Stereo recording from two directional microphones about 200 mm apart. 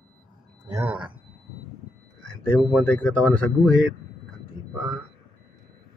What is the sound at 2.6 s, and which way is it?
Speech, 5° left (ahead or behind).